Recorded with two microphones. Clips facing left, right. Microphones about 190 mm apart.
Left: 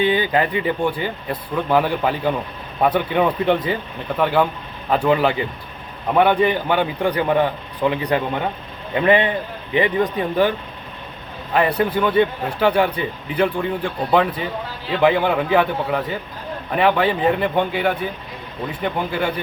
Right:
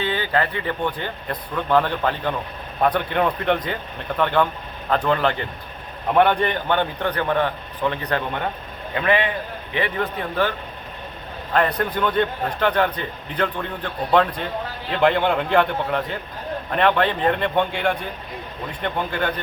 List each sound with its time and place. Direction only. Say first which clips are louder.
0.0 s a man's voice: left 5 dB; 15° left (ahead or behind)
11.5 s a man's voice: left 3 dB; 10° left (ahead or behind)